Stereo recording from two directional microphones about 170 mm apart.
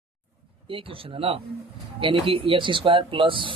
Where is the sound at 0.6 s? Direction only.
30° right (ahead or behind).